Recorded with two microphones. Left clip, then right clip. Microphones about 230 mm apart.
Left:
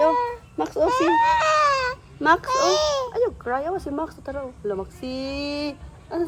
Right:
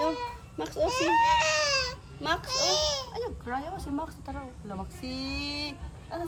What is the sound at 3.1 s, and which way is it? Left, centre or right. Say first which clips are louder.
Speech: left 11 dB; left.